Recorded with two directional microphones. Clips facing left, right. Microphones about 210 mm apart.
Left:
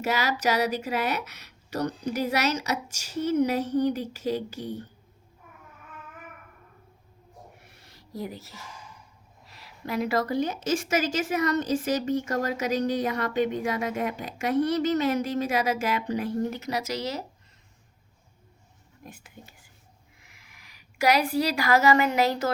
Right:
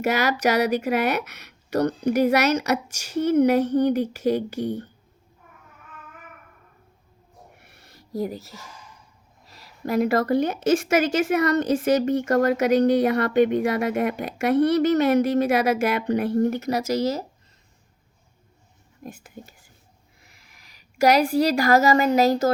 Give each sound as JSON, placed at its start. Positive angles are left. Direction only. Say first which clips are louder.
{"t": 0.0, "sound": "speech", "louder": "right 5 dB", "side_deg": -65}
{"t": 7.6, "sound": "a sound", "louder": "right 2 dB", "side_deg": -55}
{"t": 9.5, "sound": "speech", "louder": "right 7 dB", "side_deg": -40}
{"t": 19.0, "sound": "speech", "louder": "right 7 dB", "side_deg": -45}